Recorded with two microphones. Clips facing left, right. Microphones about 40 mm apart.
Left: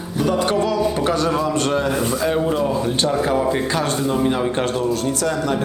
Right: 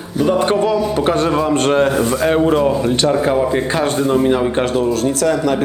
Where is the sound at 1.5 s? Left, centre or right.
Right.